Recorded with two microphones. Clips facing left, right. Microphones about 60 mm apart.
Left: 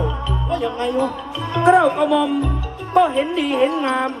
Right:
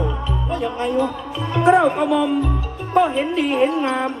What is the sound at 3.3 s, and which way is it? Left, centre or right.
Speech, right.